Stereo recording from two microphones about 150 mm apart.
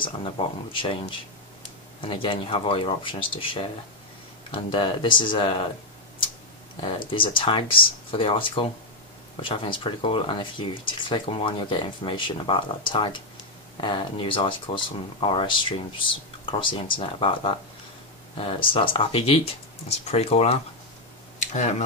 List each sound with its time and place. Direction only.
0.0 s speech: 35° left (ahead or behind)
7.1 s speech: 35° left (ahead or behind); by 21.8 s 50° left (ahead or behind)